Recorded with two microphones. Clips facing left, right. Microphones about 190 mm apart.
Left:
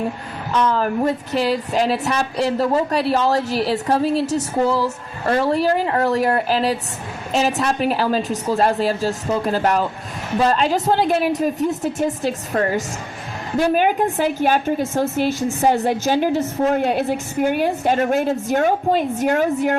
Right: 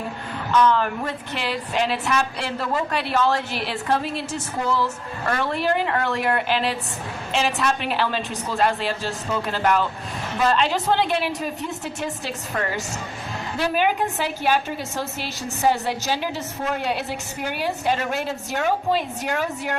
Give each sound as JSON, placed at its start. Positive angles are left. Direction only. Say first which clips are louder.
{"t": 0.5, "sound": "a woman's voice", "louder": "left 1 dB", "side_deg": 30}